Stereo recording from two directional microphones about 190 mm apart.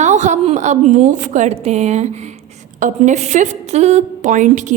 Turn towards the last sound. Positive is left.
turn(degrees=-40)  # may be behind; listen again after turning